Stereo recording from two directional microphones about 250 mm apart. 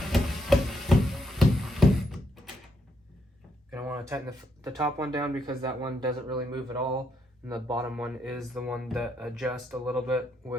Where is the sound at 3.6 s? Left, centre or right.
Centre.